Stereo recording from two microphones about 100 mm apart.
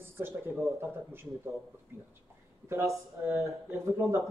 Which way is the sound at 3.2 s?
30° right (ahead or behind).